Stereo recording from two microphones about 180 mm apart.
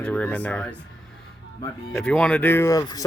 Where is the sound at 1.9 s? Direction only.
5° left (ahead or behind); by 3.0 s 20° left (ahead or behind).